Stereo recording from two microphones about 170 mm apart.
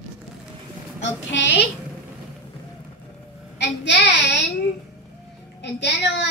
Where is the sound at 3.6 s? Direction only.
90° left.